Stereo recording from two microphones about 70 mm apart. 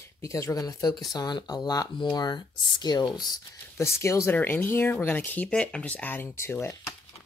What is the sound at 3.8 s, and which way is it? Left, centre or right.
Speech, left.